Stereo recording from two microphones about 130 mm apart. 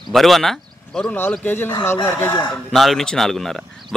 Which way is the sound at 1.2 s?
15° left (ahead or behind).